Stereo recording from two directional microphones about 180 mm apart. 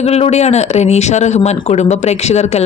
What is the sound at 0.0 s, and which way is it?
Speech, 35° left (ahead or behind).